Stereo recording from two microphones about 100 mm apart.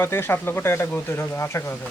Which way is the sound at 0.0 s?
25° left (ahead or behind).